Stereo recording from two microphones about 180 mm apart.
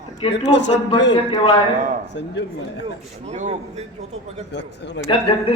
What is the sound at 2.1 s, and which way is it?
Speech, 75° left (ahead or behind).